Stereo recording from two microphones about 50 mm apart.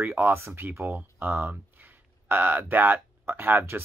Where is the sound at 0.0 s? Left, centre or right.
Right.